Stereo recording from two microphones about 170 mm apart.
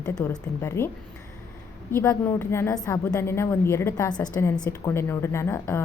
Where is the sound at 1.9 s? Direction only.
15° left (ahead or behind).